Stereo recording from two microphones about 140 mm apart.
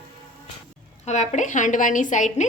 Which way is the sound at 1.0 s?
55° left (ahead or behind).